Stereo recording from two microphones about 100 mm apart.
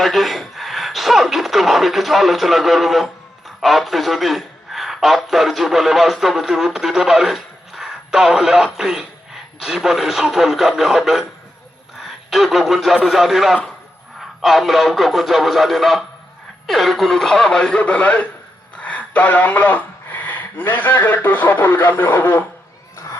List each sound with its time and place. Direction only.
0.0 s speech: centre (ahead or behind); by 22.4 s 20° left (ahead or behind)